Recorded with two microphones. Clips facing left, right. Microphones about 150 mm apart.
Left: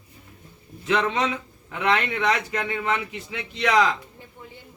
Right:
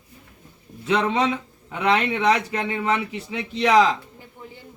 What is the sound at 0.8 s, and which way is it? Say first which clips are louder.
Speech: right 2 dB; 25° right (ahead or behind).